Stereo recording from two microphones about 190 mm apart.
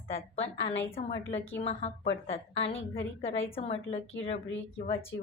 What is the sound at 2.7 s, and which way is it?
Speech, 85° left.